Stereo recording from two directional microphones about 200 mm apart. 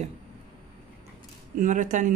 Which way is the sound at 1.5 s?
40° right (ahead or behind).